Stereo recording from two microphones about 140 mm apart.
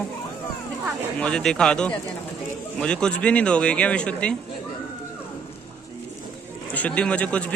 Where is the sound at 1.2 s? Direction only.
5° left (ahead or behind).